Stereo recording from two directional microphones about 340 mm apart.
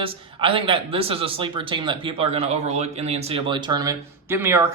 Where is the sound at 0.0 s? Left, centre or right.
Centre.